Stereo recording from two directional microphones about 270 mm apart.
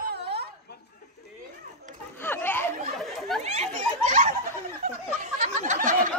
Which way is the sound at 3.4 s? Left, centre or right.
Right.